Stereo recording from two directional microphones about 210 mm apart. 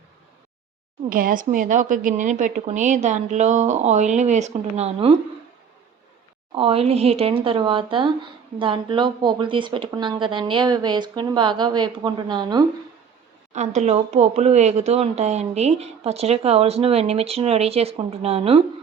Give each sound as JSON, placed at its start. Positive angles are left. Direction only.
{"t": 1.1, "sound": "a woman's voice", "side_deg": -40}
{"t": 6.5, "sound": "speech", "side_deg": -25}
{"t": 13.5, "sound": "speech", "side_deg": -35}